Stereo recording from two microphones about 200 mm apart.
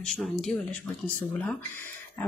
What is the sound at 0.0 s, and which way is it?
Speech, centre (ahead or behind).